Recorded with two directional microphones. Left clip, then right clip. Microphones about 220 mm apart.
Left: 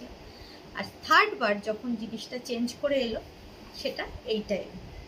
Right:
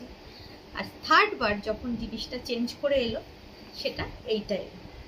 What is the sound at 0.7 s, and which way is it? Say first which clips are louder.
A woman's voice: even; 5° right (ahead or behind).